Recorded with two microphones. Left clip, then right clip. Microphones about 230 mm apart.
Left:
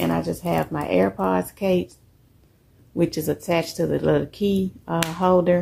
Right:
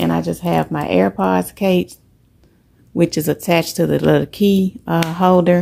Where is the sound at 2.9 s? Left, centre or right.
Right.